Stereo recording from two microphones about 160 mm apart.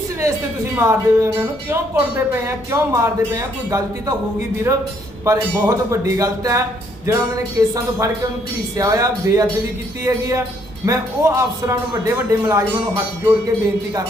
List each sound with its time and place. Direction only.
0.2 s a man's voice: 20° right (ahead or behind)